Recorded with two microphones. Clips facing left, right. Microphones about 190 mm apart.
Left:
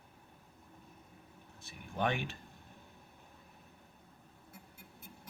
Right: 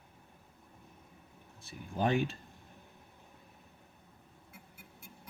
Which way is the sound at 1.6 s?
35° right (ahead or behind).